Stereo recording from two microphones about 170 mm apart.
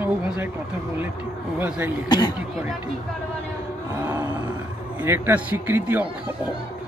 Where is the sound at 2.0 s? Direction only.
25° left (ahead or behind).